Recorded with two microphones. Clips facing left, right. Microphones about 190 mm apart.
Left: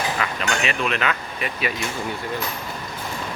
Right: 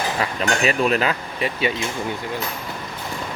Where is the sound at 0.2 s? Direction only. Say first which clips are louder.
Right 3 dB; 35° right (ahead or behind).